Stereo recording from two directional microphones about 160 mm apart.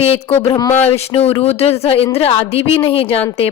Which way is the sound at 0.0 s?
40° left (ahead or behind).